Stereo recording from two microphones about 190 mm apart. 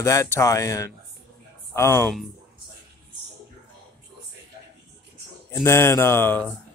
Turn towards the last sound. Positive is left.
turn(degrees=10)  # may be behind; listen again after turning